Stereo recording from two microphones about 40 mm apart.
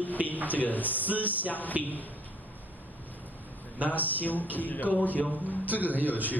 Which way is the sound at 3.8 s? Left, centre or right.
Left.